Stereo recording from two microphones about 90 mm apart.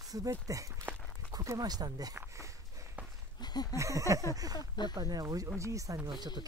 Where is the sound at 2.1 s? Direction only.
35° right (ahead or behind).